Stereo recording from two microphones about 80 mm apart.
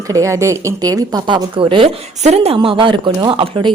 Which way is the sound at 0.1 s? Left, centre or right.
Right.